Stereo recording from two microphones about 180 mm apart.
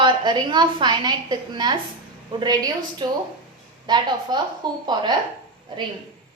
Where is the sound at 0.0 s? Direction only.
25° right (ahead or behind).